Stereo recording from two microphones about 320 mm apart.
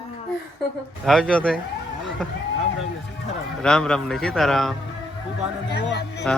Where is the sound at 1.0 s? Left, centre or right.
Centre.